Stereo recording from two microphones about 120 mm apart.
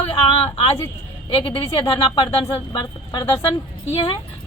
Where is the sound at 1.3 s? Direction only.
45° left (ahead or behind).